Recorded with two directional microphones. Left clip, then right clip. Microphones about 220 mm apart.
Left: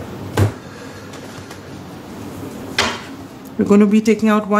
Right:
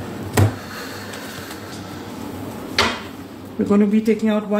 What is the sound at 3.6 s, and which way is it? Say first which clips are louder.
Speech: left 4 dB; 25° left (ahead or behind).